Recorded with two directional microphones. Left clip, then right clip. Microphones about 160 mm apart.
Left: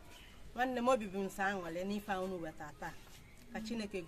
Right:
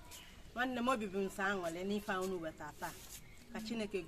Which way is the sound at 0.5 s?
10° left (ahead or behind).